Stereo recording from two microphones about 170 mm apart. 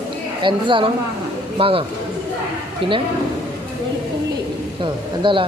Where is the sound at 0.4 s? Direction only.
30° right (ahead or behind).